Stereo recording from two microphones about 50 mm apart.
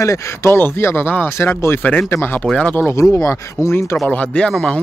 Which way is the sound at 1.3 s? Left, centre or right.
Left.